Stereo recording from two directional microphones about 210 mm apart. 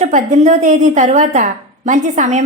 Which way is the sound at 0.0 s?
35° right (ahead or behind).